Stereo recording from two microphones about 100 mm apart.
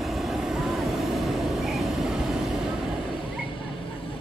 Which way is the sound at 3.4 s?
65° left (ahead or behind).